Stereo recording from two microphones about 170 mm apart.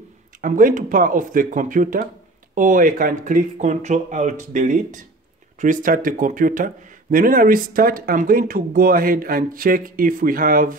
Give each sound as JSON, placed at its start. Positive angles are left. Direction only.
{"t": 0.4, "sound": "speech", "side_deg": -55}